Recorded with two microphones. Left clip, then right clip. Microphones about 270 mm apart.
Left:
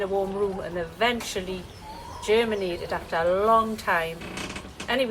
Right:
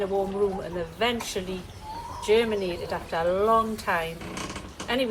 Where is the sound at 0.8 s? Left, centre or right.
Centre.